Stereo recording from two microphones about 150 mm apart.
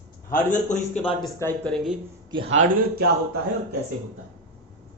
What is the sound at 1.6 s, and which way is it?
Speech, 5° left (ahead or behind).